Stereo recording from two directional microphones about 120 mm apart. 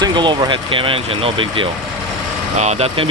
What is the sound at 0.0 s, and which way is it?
Speech, 40° right (ahead or behind).